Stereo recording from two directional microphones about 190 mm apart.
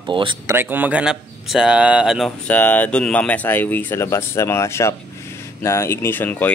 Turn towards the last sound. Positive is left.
turn(degrees=10)  # may be behind; listen again after turning